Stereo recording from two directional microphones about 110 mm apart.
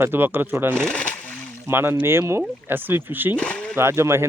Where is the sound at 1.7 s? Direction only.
20° right (ahead or behind).